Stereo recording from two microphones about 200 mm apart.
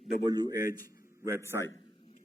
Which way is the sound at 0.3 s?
20° right (ahead or behind).